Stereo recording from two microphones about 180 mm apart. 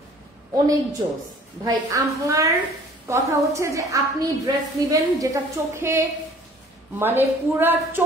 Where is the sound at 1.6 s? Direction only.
20° right (ahead or behind).